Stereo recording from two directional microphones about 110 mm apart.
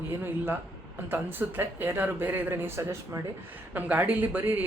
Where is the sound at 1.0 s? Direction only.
20° right (ahead or behind).